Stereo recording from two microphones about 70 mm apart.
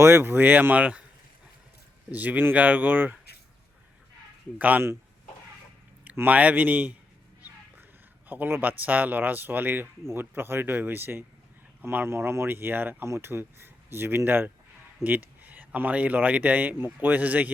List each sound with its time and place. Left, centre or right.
0.0 s speech: right; by 1.0 s centre
2.0 s speech: right
4.5 s speech: right
6.2 s speech: right
8.3 s speech: right